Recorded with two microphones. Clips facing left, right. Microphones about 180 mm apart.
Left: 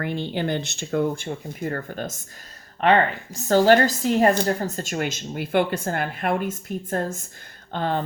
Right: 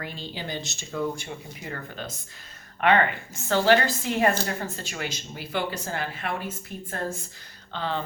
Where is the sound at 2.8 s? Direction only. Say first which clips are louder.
Left 3 dB; 35° left (ahead or behind).